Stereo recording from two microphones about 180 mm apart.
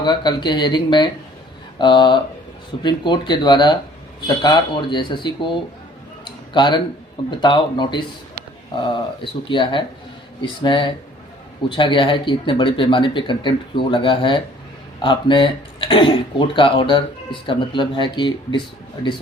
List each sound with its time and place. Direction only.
0.0 s speech: 25° left (ahead or behind)
6.5 s speech: 25° left (ahead or behind)